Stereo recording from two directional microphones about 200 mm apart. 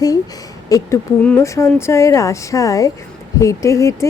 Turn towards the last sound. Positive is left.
turn(degrees=15)  # may be behind; listen again after turning